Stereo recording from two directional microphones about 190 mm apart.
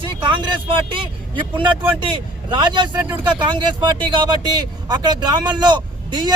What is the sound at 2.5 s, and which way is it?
Speech, 25° right (ahead or behind).